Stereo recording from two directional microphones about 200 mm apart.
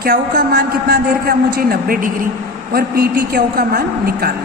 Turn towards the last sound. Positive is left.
turn(degrees=-50)  # may be behind; listen again after turning